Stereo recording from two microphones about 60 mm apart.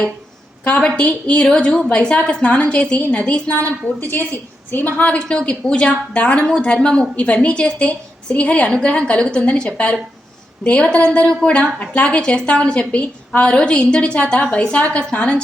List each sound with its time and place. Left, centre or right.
0.6 s a woman's voice: centre
4.9 s a woman's voice: left